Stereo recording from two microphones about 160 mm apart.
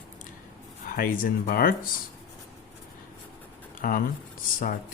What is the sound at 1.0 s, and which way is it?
Speech, 65° left (ahead or behind).